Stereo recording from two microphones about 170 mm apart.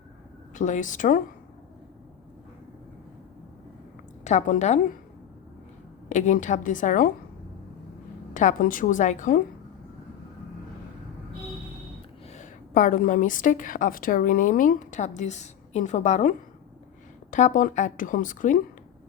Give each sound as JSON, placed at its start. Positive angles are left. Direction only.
{"t": 0.5, "sound": "a woman's voice", "side_deg": 45}
{"t": 4.2, "sound": "a woman's voice", "side_deg": 45}
{"t": 6.1, "sound": "a woman's voice", "side_deg": 45}
{"t": 8.3, "sound": "a woman's voice", "side_deg": 50}
{"t": 12.3, "sound": "a woman's voice", "side_deg": 45}
{"t": 17.3, "sound": "a woman's voice", "side_deg": 50}